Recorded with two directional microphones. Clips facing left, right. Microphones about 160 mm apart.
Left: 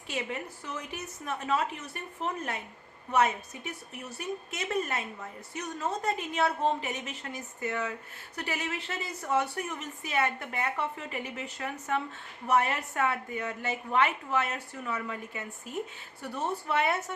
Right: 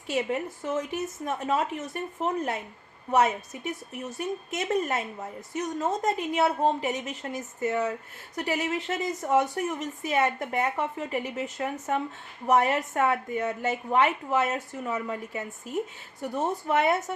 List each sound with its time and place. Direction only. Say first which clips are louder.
0.1 s a woman's voice: right 7 dB; 45° right (ahead or behind)